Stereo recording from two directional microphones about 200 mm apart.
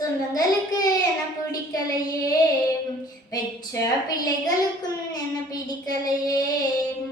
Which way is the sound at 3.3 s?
20° left (ahead or behind).